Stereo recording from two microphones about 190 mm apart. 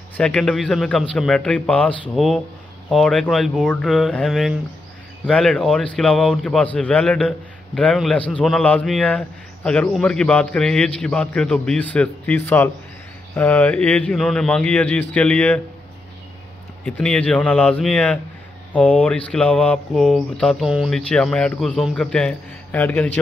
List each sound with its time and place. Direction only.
0.2 s a man's voice: 5° left (ahead or behind)
16.8 s a man's voice: 5° left (ahead or behind)